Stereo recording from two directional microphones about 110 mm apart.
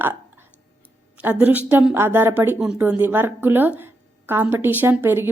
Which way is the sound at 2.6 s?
10° right (ahead or behind).